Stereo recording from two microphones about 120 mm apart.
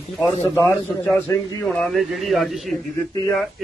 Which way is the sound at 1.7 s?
Centre (ahead or behind).